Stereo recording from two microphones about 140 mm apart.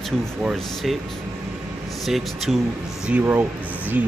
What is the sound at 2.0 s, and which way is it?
Speech, centre (ahead or behind).